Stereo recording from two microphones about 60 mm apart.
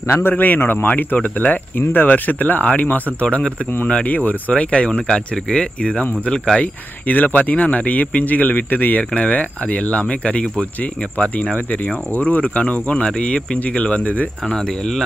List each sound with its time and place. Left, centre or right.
0.1 s speech: left; by 6.7 s centre
7.0 s speech: left
14.4 s speech: centre